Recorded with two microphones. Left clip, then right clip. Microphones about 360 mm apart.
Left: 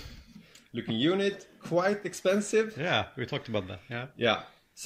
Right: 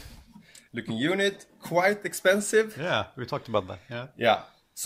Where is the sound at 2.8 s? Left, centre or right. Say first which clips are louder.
Right 1 dB; centre.